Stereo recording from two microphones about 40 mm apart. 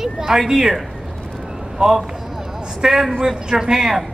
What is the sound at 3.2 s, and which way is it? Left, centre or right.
Speech, centre.